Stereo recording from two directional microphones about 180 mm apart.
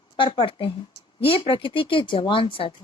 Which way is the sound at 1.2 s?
30° left (ahead or behind).